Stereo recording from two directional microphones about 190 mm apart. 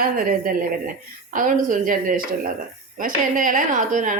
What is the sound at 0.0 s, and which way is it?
A woman's voice, 45° right (ahead or behind).